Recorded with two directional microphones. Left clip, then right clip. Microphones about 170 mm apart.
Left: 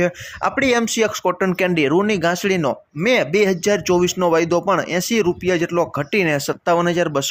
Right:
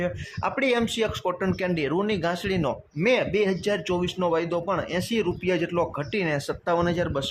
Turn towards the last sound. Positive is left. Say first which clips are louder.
# left 7 dB
turn(degrees=25)  # may be behind; listen again after turning